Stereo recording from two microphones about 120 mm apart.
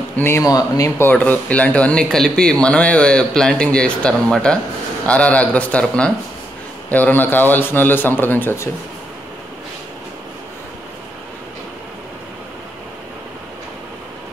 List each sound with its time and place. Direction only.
0.1 s speech: 20° left (ahead or behind)
1.1 s speech: 10° left (ahead or behind)